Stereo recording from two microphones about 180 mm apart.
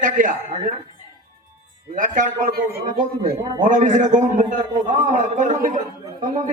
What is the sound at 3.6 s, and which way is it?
A man's voice, 45° right (ahead or behind).